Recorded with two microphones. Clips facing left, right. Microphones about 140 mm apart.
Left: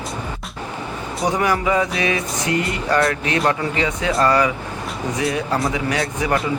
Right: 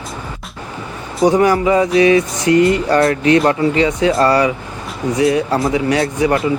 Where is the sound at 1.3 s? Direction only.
30° right (ahead or behind).